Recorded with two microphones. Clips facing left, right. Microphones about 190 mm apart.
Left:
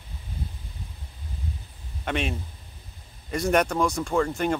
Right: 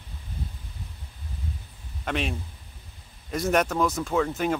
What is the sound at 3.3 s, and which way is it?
Speech, centre (ahead or behind).